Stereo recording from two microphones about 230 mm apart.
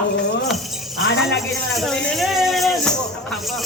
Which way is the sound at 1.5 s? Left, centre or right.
Centre.